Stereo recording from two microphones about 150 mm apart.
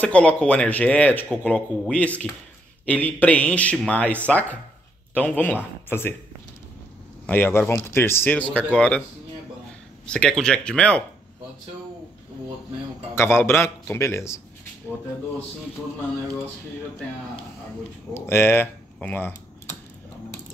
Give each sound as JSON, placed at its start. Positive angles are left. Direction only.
{"t": 0.0, "sound": "speech", "side_deg": 10}
{"t": 7.2, "sound": "speech", "side_deg": 15}
{"t": 10.0, "sound": "speech", "side_deg": 5}
{"t": 13.1, "sound": "speech", "side_deg": 15}
{"t": 18.1, "sound": "speech", "side_deg": 15}